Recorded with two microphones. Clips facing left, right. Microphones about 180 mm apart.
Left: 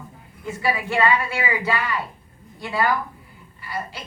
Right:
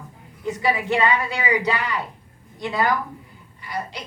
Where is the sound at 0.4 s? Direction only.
20° right (ahead or behind).